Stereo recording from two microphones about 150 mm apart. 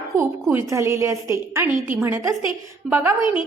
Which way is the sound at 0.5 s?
20° right (ahead or behind).